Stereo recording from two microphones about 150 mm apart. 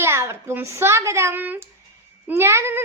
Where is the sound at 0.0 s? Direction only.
15° right (ahead or behind).